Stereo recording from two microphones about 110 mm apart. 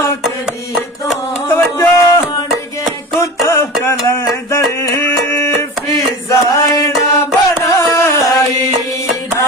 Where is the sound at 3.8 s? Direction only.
25° left (ahead or behind).